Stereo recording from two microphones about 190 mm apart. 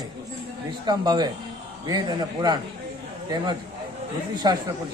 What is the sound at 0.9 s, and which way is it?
Speech, 20° right (ahead or behind).